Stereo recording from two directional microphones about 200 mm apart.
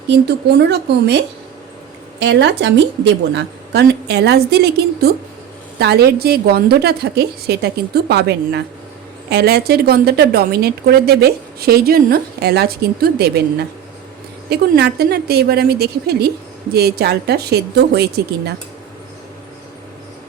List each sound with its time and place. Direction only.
0.1 s a woman's voice: 55° right (ahead or behind)